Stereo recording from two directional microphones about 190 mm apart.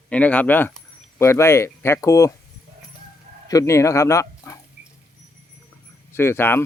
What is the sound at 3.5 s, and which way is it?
Speech, 15° left (ahead or behind).